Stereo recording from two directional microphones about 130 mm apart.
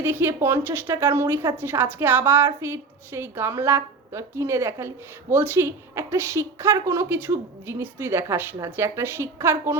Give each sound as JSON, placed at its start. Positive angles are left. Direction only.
{"t": 0.0, "sound": "speech", "side_deg": -15}